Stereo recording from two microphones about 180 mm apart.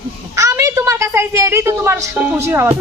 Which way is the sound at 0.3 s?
15° right (ahead or behind).